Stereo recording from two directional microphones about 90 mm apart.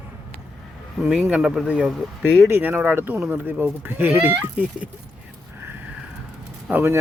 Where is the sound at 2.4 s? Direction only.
25° right (ahead or behind).